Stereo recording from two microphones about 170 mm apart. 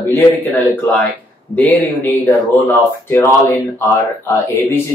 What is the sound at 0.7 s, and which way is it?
Speech, 10° left (ahead or behind).